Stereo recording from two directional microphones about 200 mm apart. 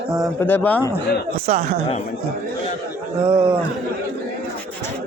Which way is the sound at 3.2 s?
30° right (ahead or behind).